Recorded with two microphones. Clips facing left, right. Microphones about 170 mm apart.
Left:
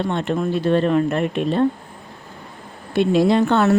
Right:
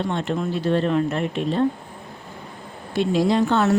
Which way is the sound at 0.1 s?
55° left (ahead or behind).